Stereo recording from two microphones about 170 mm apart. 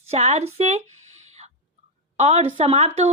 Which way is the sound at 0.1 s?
40° right (ahead or behind).